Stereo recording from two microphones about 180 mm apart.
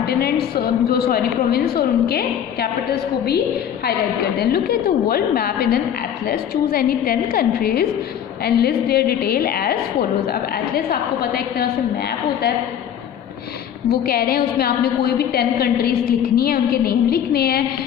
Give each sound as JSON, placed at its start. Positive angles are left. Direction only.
{"t": 0.0, "sound": "a woman's voice", "side_deg": 60}
{"t": 13.8, "sound": "a woman's voice", "side_deg": 55}